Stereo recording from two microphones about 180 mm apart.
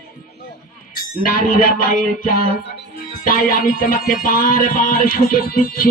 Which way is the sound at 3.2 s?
50° left (ahead or behind).